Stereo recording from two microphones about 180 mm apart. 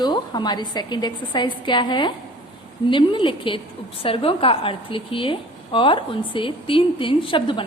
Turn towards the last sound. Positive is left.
turn(degrees=30)  # may be behind; listen again after turning